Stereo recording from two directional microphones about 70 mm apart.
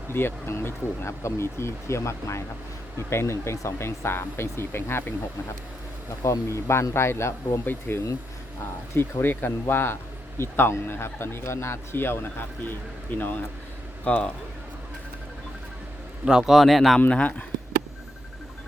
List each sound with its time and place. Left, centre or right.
0.1 s speech: left
6.5 s speech: left; by 14.3 s centre
16.2 s speech: centre
17.1 s speech: centre